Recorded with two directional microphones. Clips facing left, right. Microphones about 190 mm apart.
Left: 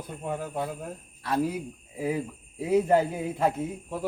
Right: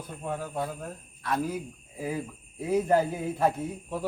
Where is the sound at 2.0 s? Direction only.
15° left (ahead or behind).